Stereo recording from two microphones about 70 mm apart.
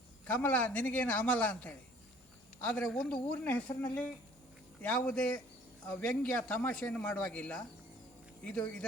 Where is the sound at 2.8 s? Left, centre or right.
Centre.